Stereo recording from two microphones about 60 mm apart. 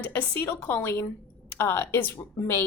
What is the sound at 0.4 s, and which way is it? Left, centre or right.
A woman's voice, left.